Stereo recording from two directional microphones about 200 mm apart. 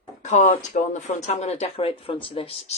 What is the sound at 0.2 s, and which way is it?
Speech, 35° left (ahead or behind).